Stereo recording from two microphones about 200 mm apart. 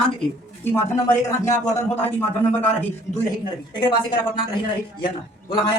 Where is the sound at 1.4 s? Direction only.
10° left (ahead or behind).